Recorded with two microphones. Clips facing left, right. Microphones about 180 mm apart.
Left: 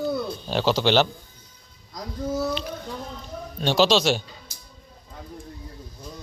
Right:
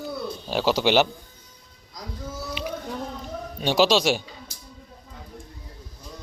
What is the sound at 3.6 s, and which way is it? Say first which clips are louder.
Speech: even; 10° right (ahead or behind).